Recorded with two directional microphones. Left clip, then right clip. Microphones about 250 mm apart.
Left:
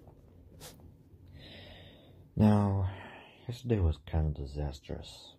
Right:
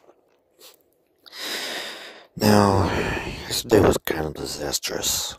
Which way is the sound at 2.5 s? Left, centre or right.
Right.